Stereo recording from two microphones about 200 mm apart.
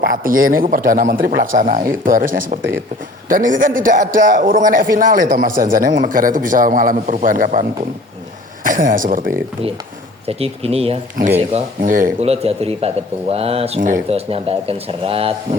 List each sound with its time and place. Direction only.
0.0 s a man's voice: 45° right (ahead or behind)
10.2 s a man's voice: 30° right (ahead or behind)